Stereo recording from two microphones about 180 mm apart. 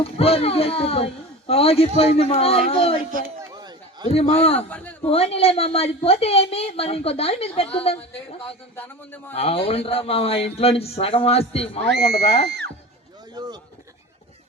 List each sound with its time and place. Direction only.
0.0 s a woman's voice: 35° left (ahead or behind)
3.1 s speech: 50° right (ahead or behind)
3.4 s a sound: 20° right (ahead or behind)
4.1 s a woman's voice: 35° left (ahead or behind)
4.7 s a man's voice: 10° left (ahead or behind)
5.0 s a woman's voice: 35° left (ahead or behind)
12.5 s speech: 65° right (ahead or behind)
13.3 s speech: 20° right (ahead or behind)